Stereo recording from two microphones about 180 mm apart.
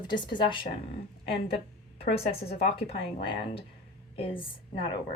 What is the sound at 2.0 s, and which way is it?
A woman's voice, 30° left (ahead or behind).